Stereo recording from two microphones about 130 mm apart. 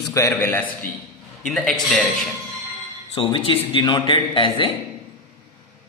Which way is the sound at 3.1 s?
40° left (ahead or behind).